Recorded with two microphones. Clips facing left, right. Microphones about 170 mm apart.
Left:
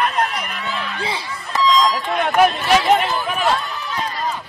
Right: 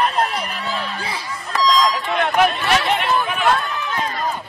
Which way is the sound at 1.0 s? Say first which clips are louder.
Left 2 dB; 25° left (ahead or behind).